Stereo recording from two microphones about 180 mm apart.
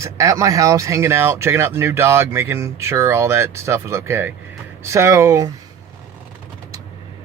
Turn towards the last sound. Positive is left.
turn(degrees=-15)  # may be behind; listen again after turning